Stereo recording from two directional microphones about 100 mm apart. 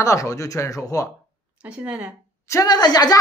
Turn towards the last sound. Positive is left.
turn(degrees=40)  # may be behind; listen again after turning